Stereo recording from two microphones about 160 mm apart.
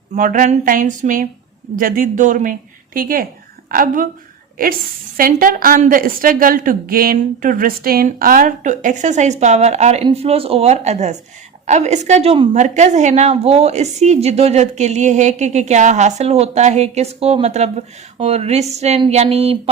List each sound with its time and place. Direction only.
0.1 s a woman's voice: 55° right (ahead or behind)
5.1 s a woman's voice: 60° right (ahead or behind); by 19.7 s 40° right (ahead or behind)